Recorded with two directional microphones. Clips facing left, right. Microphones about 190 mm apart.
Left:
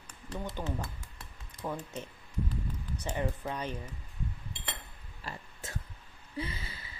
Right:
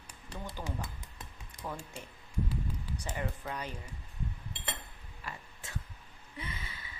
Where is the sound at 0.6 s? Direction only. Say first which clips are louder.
Left 3 dB; 15° right (ahead or behind).